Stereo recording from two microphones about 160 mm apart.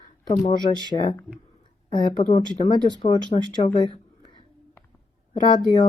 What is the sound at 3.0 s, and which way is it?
Speech, 50° left (ahead or behind).